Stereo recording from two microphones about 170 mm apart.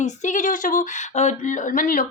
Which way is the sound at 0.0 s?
45° left (ahead or behind).